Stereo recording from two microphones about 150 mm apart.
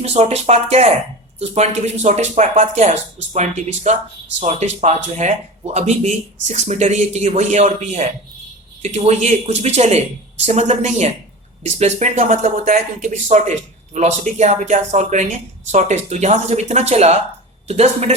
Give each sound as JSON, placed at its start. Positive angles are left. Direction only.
{"t": 0.0, "sound": "speech", "side_deg": -45}